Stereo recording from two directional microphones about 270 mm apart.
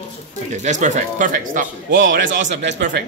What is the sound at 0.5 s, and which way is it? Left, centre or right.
A man's voice, right.